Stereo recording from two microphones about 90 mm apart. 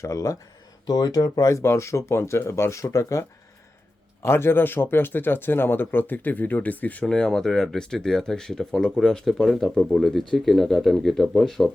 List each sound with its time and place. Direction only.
0.0 s speech: 35° left (ahead or behind)
0.9 s speech: 45° left (ahead or behind); by 11.7 s 5° left (ahead or behind)